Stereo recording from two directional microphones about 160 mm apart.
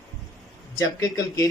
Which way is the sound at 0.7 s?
20° left (ahead or behind).